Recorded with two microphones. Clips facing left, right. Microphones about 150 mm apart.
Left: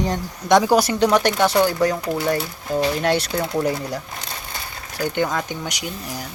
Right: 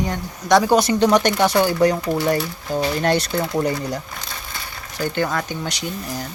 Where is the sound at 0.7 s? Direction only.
5° left (ahead or behind).